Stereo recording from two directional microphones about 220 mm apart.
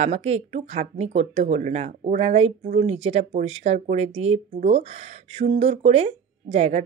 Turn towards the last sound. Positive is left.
turn(degrees=-30)  # may be behind; listen again after turning